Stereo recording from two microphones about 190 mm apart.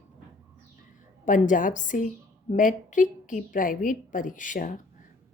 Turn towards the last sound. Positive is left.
turn(degrees=45)  # may be behind; listen again after turning